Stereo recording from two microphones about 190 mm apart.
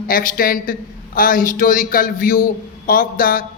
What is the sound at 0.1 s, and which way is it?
A man's voice, 50° left (ahead or behind).